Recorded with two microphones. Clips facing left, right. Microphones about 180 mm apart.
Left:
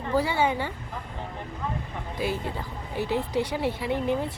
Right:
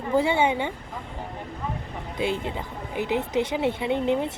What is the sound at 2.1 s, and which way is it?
Speech, 25° right (ahead or behind).